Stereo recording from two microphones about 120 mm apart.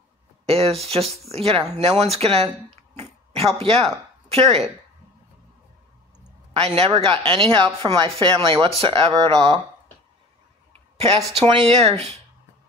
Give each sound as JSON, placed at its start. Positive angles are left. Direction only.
{"t": 0.5, "sound": "speech", "side_deg": -55}
{"t": 6.5, "sound": "speech", "side_deg": -55}
{"t": 8.6, "sound": "speech", "side_deg": -50}
{"t": 11.0, "sound": "speech", "side_deg": -55}